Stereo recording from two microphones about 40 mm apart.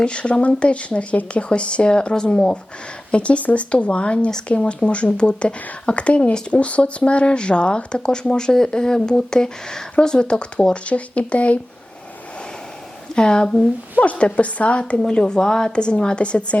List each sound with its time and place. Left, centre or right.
0.0 s speech: left
13.1 s speech: centre
14.0 s speech: left